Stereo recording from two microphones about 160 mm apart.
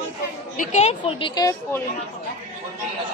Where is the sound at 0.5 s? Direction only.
50° left (ahead or behind); by 1.5 s 30° left (ahead or behind).